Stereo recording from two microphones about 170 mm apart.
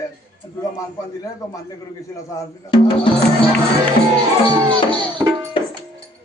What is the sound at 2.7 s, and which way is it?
Speech, 30° left (ahead or behind).